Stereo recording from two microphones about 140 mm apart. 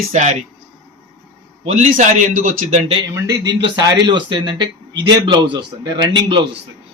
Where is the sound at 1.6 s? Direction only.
60° right (ahead or behind).